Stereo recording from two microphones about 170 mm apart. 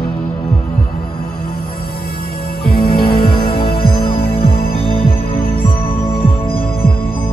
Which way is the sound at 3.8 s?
35° left (ahead or behind).